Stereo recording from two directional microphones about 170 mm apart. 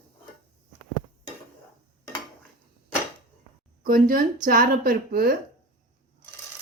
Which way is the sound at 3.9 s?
55° right (ahead or behind).